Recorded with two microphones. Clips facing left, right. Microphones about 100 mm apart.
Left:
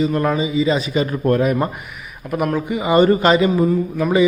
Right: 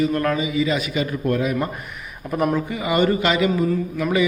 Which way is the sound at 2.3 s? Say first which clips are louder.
Left 1 dB; 5° left (ahead or behind).